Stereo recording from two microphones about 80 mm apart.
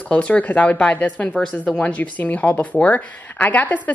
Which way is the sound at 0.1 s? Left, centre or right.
Centre.